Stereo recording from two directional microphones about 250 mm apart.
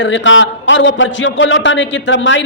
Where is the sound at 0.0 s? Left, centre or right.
Left.